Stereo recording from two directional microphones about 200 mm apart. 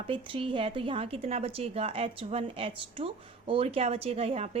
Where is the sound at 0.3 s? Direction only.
25° right (ahead or behind).